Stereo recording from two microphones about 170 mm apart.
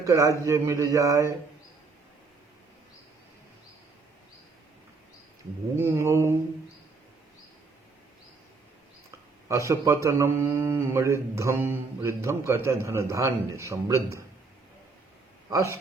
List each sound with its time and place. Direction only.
0.0 s speech: 20° right (ahead or behind)
5.7 s a man's voice: 15° right (ahead or behind)
9.5 s a man's voice: 20° right (ahead or behind)
15.4 s speech: 15° right (ahead or behind)